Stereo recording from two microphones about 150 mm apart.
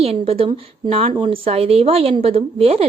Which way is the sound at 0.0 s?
40° right (ahead or behind).